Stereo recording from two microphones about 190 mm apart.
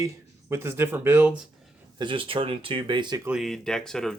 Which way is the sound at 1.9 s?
25° right (ahead or behind).